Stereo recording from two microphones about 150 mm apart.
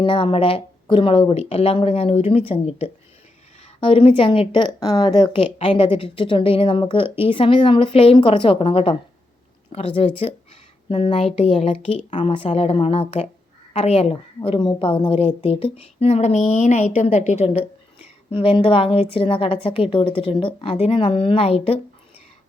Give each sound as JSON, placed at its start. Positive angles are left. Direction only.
{"t": 0.0, "sound": "a woman's voice", "side_deg": 35}
{"t": 11.9, "sound": "a woman's voice", "side_deg": 50}
{"t": 18.3, "sound": "speech", "side_deg": 35}